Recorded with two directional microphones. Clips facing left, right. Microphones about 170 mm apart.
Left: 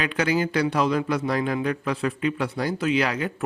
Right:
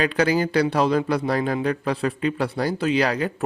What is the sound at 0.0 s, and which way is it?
Speech, 35° right (ahead or behind).